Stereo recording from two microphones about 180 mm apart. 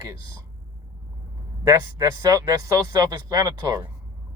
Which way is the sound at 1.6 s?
20° right (ahead or behind).